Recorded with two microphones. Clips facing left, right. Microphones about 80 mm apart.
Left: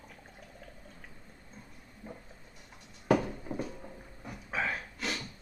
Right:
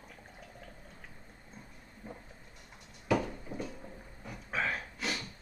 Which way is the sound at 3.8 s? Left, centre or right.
Centre.